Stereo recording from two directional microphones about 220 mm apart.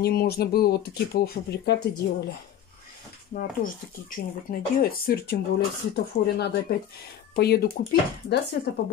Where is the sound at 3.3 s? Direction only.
40° left (ahead or behind).